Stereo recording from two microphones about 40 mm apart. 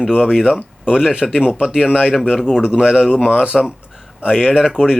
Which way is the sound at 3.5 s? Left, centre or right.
Centre.